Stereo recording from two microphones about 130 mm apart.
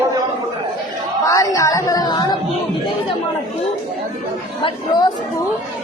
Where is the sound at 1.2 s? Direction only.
25° left (ahead or behind).